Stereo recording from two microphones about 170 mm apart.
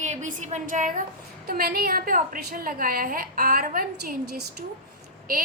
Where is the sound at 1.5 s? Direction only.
65° right (ahead or behind).